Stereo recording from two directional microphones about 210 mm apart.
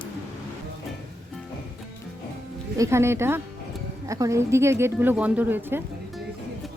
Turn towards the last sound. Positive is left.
turn(degrees=-10)  # may be behind; listen again after turning